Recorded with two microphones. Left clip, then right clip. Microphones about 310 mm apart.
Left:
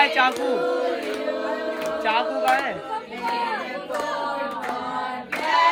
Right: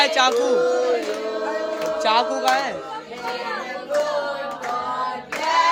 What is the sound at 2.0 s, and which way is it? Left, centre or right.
Speech, centre.